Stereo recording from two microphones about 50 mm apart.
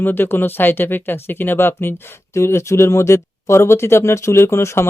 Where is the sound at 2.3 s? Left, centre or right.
Left.